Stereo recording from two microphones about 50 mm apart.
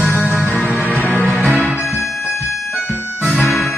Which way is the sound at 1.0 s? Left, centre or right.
Left.